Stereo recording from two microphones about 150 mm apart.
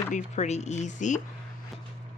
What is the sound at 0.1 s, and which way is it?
A woman's voice, 50° left (ahead or behind).